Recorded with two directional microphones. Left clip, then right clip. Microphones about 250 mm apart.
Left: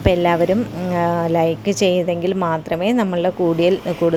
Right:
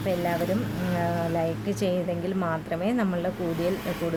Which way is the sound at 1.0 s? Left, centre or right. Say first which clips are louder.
Left 10 dB; left.